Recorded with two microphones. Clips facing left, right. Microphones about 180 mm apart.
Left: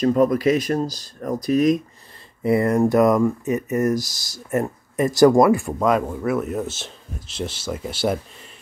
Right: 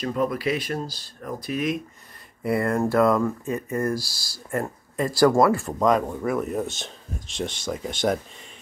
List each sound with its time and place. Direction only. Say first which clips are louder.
0.0 s speech: left 8 dB; 45° left (ahead or behind)
2.4 s speech: left 5 dB; 20° left (ahead or behind)